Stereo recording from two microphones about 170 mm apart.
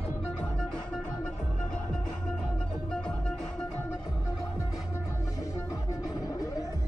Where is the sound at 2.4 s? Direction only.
5° left (ahead or behind).